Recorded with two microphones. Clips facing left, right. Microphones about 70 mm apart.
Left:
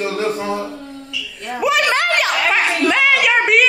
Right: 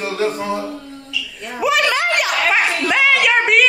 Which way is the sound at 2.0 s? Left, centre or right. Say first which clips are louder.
Left 1 dB; left.